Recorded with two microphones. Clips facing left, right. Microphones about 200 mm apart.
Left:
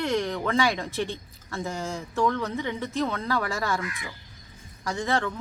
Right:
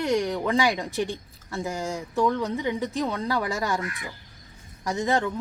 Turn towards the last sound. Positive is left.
turn(degrees=-15)  # may be behind; listen again after turning